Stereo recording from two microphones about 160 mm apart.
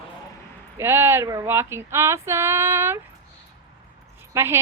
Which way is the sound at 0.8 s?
15° right (ahead or behind).